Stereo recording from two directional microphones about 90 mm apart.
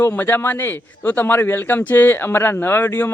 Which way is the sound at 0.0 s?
25° left (ahead or behind).